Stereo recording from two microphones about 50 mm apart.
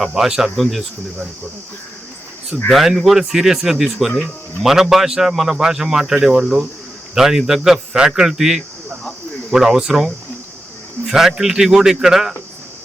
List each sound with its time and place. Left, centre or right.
0.2 s speech: centre
2.6 s a man's voice: centre
11.1 s a man's voice: centre